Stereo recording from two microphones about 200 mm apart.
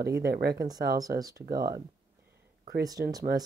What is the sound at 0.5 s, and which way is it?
Speech, 20° right (ahead or behind).